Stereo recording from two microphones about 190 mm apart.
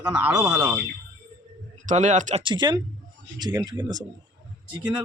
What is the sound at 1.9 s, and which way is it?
Speech, 40° right (ahead or behind).